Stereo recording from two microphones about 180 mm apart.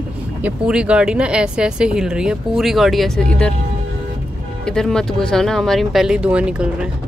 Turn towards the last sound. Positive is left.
turn(degrees=-5)  # may be behind; listen again after turning